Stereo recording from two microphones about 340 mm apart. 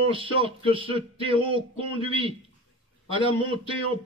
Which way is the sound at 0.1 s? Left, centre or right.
Centre.